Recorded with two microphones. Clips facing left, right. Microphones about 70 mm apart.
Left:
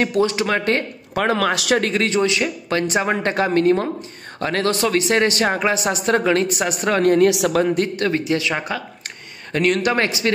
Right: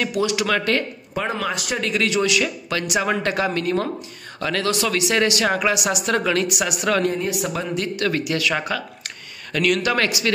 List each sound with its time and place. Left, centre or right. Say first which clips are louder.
0.0 s speech: left 3 dB; left
1.1 s a man's voice: left 6 dB; left
1.8 s speech: left 2 dB; left
7.1 s speech: left 9 dB; left
7.7 s speech: left 3 dB; left
8.1 s speech: left 2 dB; left